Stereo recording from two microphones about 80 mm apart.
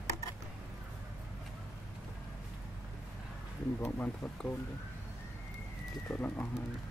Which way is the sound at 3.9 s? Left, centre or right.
Left.